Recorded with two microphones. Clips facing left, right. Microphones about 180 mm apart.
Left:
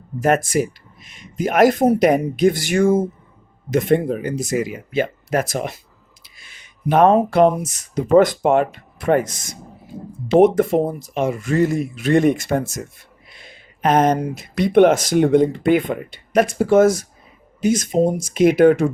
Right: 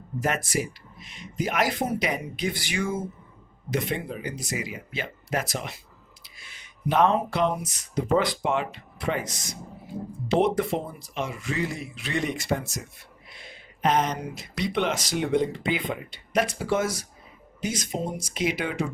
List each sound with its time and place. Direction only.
0.2 s speech: 45° left (ahead or behind)